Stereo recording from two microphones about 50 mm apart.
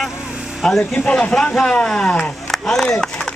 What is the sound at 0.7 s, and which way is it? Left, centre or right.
Speech, left.